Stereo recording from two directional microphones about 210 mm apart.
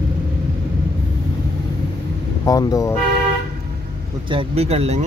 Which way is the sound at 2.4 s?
15° left (ahead or behind).